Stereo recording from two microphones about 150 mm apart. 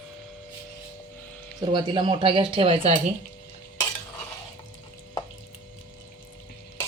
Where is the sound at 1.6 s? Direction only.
30° right (ahead or behind).